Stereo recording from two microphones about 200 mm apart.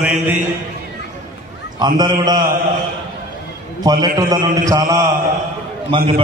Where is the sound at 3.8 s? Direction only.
20° right (ahead or behind).